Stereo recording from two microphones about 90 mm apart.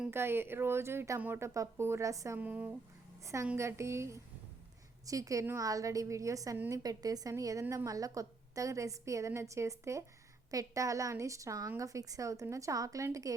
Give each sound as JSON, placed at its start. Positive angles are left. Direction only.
{"t": 0.1, "sound": "a woman's voice", "side_deg": -25}
{"t": 2.4, "sound": "speech", "side_deg": -15}
{"t": 3.4, "sound": "a woman's voice", "side_deg": -30}